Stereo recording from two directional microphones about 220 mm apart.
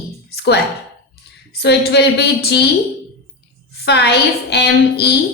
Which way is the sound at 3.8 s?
50° left (ahead or behind).